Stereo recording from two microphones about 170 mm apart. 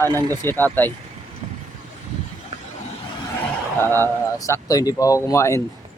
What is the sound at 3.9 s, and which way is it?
Speech, 15° left (ahead or behind).